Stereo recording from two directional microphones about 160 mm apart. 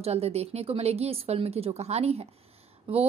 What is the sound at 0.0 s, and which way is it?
A woman's voice, 40° right (ahead or behind).